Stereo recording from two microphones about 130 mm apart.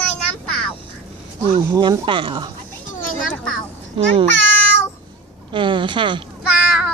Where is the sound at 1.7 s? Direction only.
35° right (ahead or behind).